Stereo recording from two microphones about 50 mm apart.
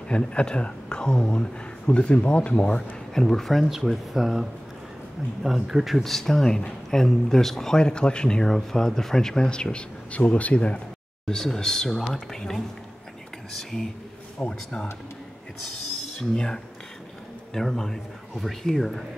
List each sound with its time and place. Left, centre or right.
0.1 s speech: left
3.2 s speech: centre
6.0 s speech: centre; by 10.8 s left
11.2 s speech: centre
16.2 s speech: centre